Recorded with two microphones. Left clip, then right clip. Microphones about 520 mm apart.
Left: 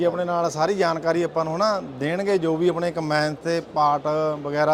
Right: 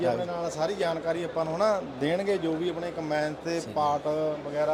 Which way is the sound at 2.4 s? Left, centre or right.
Left.